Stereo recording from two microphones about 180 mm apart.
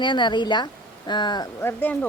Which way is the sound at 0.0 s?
25° left (ahead or behind).